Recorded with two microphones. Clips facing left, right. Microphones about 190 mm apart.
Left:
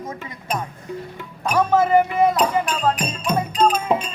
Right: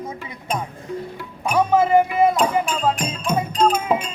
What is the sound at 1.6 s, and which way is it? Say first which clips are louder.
Speech: even; 15° right (ahead or behind).